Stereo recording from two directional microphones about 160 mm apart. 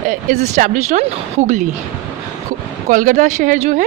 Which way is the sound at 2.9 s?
55° right (ahead or behind).